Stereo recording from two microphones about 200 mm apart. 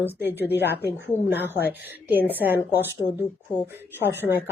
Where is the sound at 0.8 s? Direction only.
55° left (ahead or behind).